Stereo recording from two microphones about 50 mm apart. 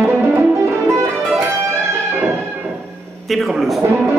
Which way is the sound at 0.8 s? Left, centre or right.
Right.